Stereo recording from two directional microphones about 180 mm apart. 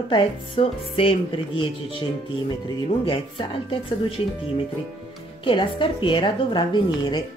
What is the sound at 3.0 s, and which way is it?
Speech, 30° left (ahead or behind).